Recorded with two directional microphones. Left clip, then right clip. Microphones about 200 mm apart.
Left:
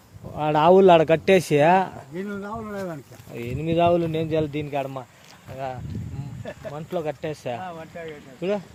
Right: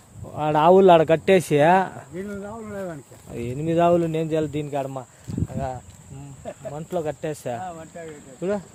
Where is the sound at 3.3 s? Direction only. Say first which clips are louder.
Right 1 dB; 15° right (ahead or behind).